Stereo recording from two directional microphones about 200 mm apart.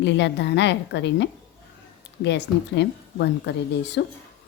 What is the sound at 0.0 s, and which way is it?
Speech, 60° left (ahead or behind).